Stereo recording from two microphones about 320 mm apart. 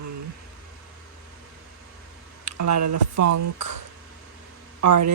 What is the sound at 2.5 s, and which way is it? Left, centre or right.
Speech, right.